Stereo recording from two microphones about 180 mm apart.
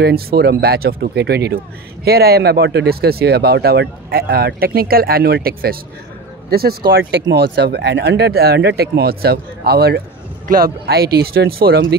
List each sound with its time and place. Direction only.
0.0 s speech: 60° right (ahead or behind)